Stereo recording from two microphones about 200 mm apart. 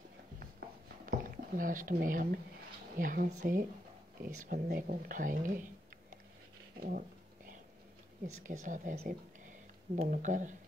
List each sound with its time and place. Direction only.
1.0 s a sound: 45° right (ahead or behind)
3.0 s speech: 45° right (ahead or behind)
6.8 s dog: 45° right (ahead or behind)
8.5 s speech: 40° right (ahead or behind)